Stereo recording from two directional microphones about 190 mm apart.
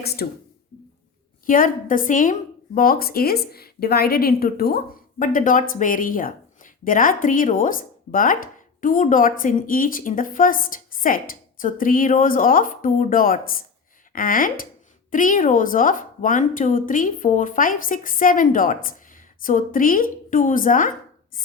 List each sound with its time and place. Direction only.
0.0 s speech: 55° left (ahead or behind)
1.5 s a woman's voice: 45° left (ahead or behind)